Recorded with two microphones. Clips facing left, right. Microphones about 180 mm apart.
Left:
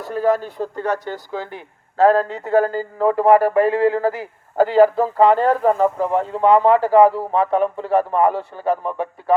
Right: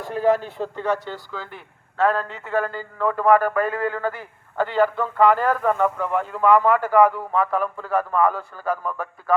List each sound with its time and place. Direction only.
0.0 s a man's voice: 40° left (ahead or behind)